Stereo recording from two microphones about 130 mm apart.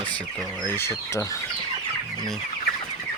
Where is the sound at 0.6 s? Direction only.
15° left (ahead or behind).